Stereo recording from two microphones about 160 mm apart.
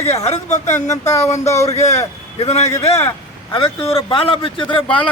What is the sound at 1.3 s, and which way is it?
Speech, 20° left (ahead or behind).